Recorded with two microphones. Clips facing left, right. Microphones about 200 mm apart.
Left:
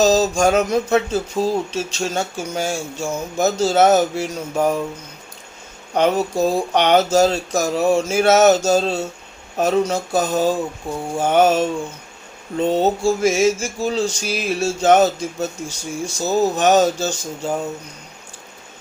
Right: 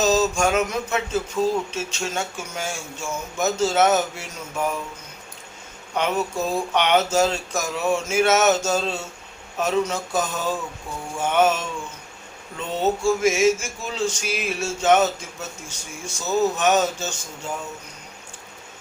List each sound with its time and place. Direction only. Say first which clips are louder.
0.0 s speech: left 5 dB; 35° left (ahead or behind)
5.9 s speech: left 6 dB; 35° left (ahead or behind)